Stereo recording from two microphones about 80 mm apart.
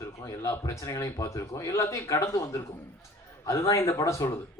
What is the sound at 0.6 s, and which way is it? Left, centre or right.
A man's voice, left.